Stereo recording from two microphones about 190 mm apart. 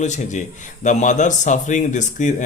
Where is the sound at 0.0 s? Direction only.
40° left (ahead or behind).